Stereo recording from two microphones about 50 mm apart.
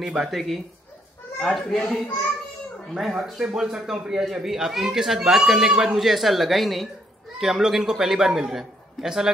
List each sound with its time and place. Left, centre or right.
0.0 s a man's voice: centre
0.3 s speech: centre
2.9 s a man's voice: centre
5.7 s speech: right
5.9 s a man's voice: centre